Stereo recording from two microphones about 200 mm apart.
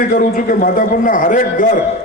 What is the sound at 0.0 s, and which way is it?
A man's voice, 45° left (ahead or behind).